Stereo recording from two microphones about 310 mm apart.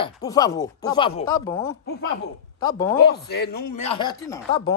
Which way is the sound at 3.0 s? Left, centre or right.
Left.